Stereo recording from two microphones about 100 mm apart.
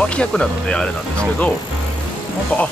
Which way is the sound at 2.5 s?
15° left (ahead or behind).